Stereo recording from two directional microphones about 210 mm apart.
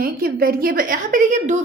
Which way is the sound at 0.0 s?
45° right (ahead or behind).